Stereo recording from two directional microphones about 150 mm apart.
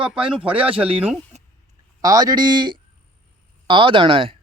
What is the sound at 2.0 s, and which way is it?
A man's voice, 25° right (ahead or behind).